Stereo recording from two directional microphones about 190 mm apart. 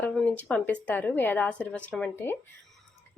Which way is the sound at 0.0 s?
5° left (ahead or behind).